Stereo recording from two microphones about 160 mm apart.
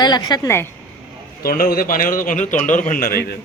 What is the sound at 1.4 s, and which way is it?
Speech, 65° left (ahead or behind).